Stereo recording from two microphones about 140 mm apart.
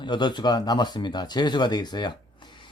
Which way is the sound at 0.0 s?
30° left (ahead or behind).